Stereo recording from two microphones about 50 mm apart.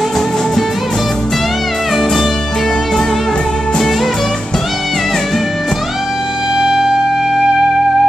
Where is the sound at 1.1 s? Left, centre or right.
Centre.